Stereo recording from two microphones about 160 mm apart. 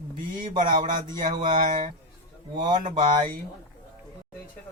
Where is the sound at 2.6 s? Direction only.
30° right (ahead or behind).